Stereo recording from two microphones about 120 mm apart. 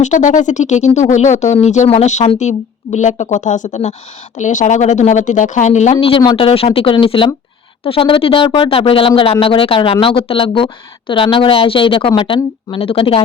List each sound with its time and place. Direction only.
0.0 s a woman's voice: 90° left; by 3.9 s 75° left (ahead or behind)
4.4 s a woman's voice: 90° left; by 6.1 s 70° left (ahead or behind)
6.1 s speech: 45° left (ahead or behind)